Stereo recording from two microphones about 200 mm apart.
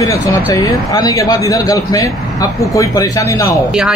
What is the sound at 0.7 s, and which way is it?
Speech, 20° left (ahead or behind).